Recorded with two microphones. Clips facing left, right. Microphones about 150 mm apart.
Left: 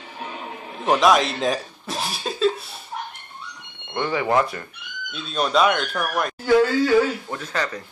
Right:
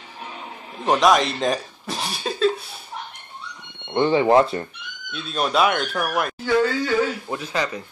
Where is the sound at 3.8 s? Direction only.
25° right (ahead or behind).